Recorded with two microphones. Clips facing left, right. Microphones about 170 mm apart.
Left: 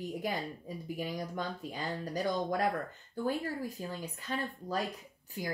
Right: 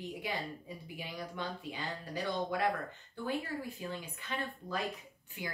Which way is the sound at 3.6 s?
40° left (ahead or behind).